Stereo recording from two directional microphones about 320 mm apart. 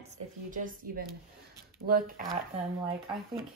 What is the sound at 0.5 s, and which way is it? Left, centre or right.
A woman's voice, right.